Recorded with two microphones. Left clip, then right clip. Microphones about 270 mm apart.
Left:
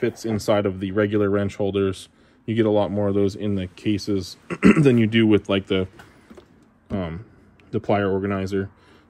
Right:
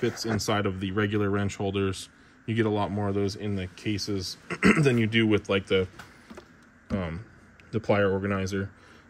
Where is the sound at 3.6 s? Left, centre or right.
Centre.